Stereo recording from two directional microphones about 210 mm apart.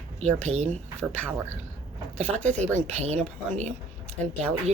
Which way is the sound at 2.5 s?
35° right (ahead or behind).